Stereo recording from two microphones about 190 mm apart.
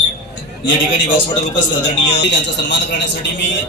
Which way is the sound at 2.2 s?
65° left (ahead or behind).